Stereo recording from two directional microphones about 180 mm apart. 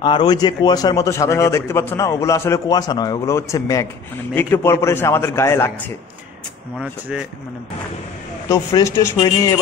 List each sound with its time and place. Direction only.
0.0 s a man's voice: 25° left (ahead or behind)
6.8 s speech: 5° right (ahead or behind)
8.5 s a man's voice: 15° left (ahead or behind)